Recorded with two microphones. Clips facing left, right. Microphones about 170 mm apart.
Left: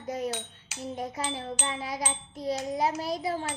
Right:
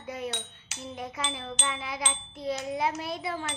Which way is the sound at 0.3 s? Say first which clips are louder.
Left 3 dB; 5° left (ahead or behind).